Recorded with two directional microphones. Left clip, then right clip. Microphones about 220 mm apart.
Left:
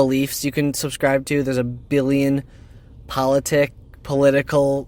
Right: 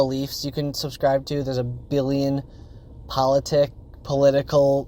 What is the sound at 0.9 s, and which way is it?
Speech, 40° left (ahead or behind).